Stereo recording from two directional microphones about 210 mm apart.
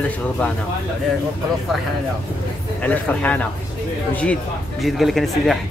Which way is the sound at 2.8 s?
5° left (ahead or behind).